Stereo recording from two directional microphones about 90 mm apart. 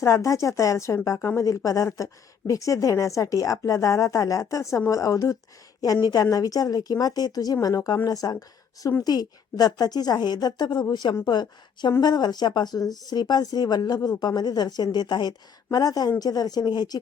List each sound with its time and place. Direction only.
0.0 s a woman's voice: 35° left (ahead or behind)